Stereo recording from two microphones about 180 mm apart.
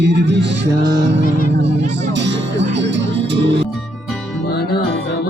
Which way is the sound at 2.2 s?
80° right.